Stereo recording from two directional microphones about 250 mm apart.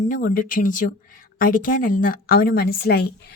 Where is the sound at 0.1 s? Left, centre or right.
Left.